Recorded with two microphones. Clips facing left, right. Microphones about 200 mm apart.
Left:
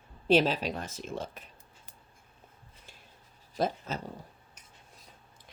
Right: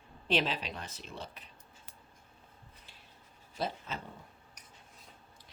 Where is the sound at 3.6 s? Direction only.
45° left (ahead or behind).